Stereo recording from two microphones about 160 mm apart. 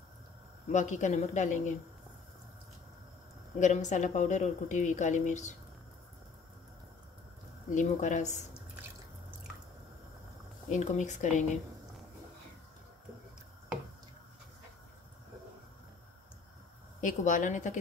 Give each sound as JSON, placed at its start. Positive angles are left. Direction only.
{"t": 0.7, "sound": "speech", "side_deg": 50}
{"t": 3.5, "sound": "speech", "side_deg": 50}
{"t": 7.7, "sound": "speech", "side_deg": 50}
{"t": 10.7, "sound": "speech", "side_deg": 50}
{"t": 17.0, "sound": "speech", "side_deg": 50}